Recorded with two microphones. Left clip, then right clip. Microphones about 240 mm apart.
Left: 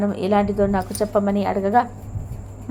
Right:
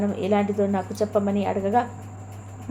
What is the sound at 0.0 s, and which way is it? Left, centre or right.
A woman's voice, centre.